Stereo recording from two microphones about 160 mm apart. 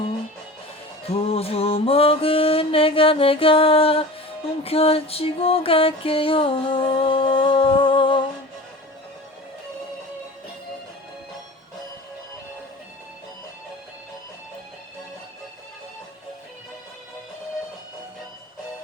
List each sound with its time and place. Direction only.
1.1 s music: 40° left (ahead or behind)